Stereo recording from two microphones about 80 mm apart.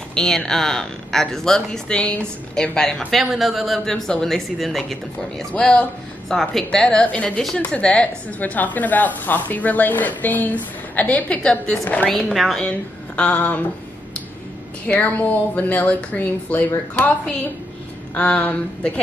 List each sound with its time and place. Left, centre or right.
0.1 s a woman's voice: centre
5.4 s speech: centre
6.2 s speech: centre
12.3 s a woman's voice: centre
12.5 s speech: centre
14.9 s speech: left